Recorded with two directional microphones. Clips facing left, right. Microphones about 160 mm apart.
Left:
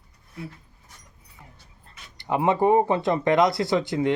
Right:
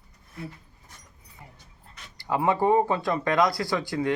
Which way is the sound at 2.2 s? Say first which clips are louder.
Left 2 dB; 20° left (ahead or behind).